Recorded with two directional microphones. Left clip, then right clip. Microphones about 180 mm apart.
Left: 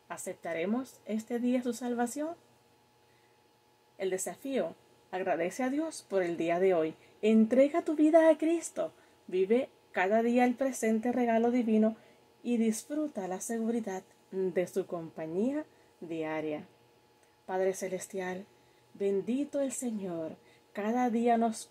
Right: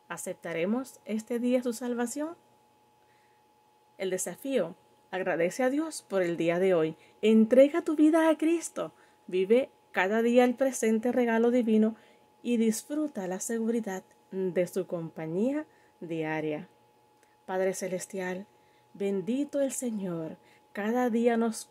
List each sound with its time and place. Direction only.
0.1 s speech: 35° right (ahead or behind)
4.0 s speech: 30° right (ahead or behind)